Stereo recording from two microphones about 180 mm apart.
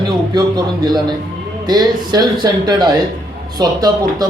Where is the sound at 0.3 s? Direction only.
20° right (ahead or behind).